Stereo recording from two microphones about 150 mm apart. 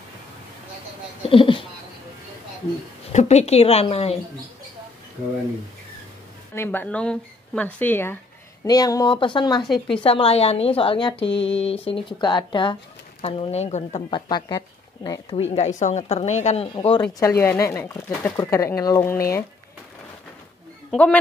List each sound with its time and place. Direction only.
1.2 s speech: 35° left (ahead or behind)
3.1 s speech: 50° left (ahead or behind)
6.5 s speech: 15° left (ahead or behind)
8.6 s speech: 25° left (ahead or behind)
9.7 s speech: 5° left (ahead or behind)
10.0 s a woman's voice: 40° left (ahead or behind)
14.1 s speech: 30° left (ahead or behind)
15.5 s speech: 50° left (ahead or behind)
16.7 s a woman's voice: 35° left (ahead or behind)
17.0 s speech: 15° left (ahead or behind)
20.9 s speech: 10° left (ahead or behind)